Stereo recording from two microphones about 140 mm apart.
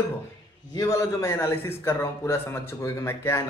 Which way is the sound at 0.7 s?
20° left (ahead or behind).